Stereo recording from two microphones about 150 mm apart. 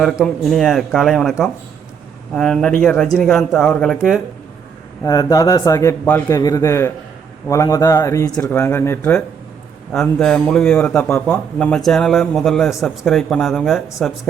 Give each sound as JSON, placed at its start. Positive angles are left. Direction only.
{"t": 0.0, "sound": "a man's voice", "side_deg": 0}
{"t": 5.0, "sound": "a man's voice", "side_deg": 25}
{"t": 9.9, "sound": "a man's voice", "side_deg": 5}